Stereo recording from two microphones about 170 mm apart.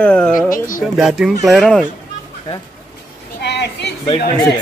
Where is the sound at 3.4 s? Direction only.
80° left.